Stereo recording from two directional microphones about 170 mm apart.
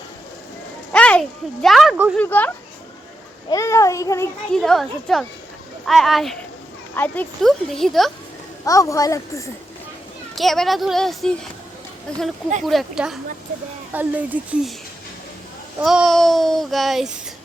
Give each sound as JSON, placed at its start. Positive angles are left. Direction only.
{"t": 0.9, "sound": "a sound", "side_deg": 5}
{"t": 1.6, "sound": "child singing", "side_deg": 0}
{"t": 2.1, "sound": "speech", "side_deg": 10}
{"t": 3.5, "sound": "a woman's voice", "side_deg": 20}
{"t": 4.5, "sound": "child singing", "side_deg": 5}
{"t": 8.6, "sound": "a woman's voice", "side_deg": 20}
{"t": 10.3, "sound": "child singing", "side_deg": 0}
{"t": 13.9, "sound": "speech", "side_deg": -10}
{"t": 15.8, "sound": "child singing", "side_deg": 0}